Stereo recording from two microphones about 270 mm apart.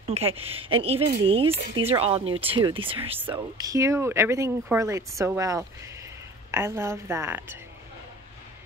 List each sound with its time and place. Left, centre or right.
0.1 s a woman's voice: right